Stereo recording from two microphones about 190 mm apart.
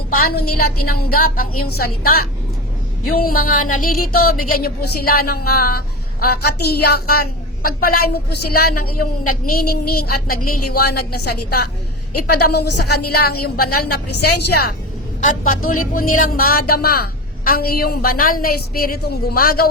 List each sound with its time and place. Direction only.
0.1 s a woman's voice: 55° left (ahead or behind)
15.2 s speech: 45° left (ahead or behind)